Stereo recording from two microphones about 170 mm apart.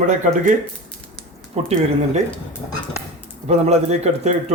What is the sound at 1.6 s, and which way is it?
Speech, 40° right (ahead or behind).